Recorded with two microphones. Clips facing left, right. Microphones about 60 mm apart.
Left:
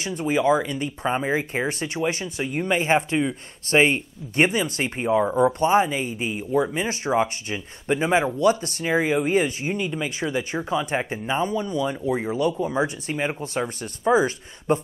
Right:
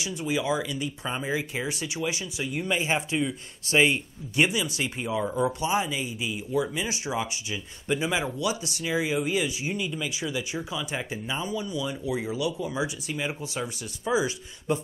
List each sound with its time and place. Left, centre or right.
0.0 s speech: left